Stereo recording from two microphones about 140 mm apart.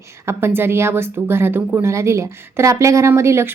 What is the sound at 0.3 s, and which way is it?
A woman's voice, 15° right (ahead or behind).